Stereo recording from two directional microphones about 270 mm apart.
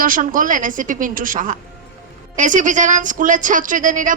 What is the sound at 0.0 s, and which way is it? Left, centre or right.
A woman's voice, right.